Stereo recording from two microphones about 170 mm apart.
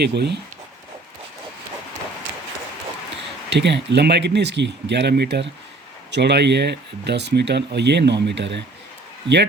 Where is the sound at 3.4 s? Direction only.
90° right.